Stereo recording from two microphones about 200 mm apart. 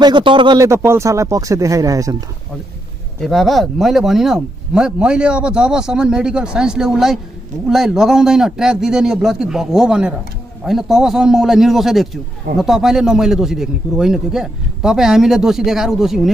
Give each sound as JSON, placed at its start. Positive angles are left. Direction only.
{"t": 0.0, "sound": "speech", "side_deg": -25}
{"t": 3.2, "sound": "speech", "side_deg": 0}